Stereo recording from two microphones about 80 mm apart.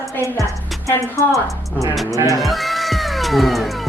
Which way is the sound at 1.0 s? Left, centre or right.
Left.